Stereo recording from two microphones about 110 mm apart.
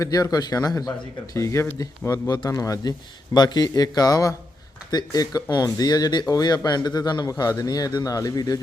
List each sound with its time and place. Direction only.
0.0 s speech: 35° left (ahead or behind)